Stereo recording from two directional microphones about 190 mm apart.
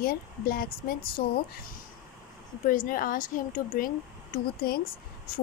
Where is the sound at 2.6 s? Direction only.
45° left (ahead or behind).